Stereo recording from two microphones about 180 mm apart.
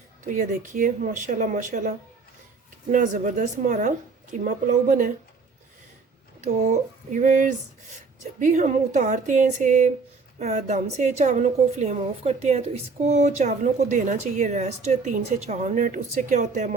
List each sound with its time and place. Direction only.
0.3 s speech: 45° right (ahead or behind)
6.4 s a woman's voice: 45° right (ahead or behind)